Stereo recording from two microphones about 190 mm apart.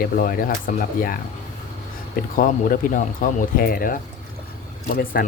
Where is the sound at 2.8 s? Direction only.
45° left (ahead or behind).